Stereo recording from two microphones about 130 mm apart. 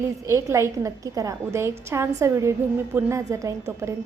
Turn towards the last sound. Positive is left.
turn(degrees=-25)  # may be behind; listen again after turning